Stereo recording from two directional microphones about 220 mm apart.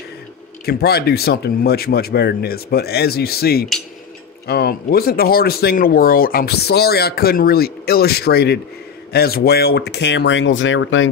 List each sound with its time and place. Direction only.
0.7 s speech: 45° left (ahead or behind); by 11.1 s 60° left (ahead or behind)